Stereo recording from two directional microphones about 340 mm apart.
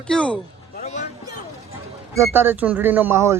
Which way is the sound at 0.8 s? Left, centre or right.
Centre.